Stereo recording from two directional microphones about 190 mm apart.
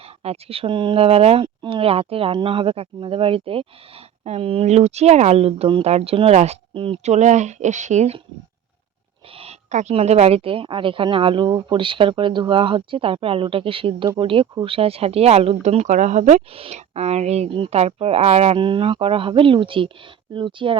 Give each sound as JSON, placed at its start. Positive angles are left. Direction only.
{"t": 0.2, "sound": "speech", "side_deg": -30}
{"t": 9.4, "sound": "speech", "side_deg": -35}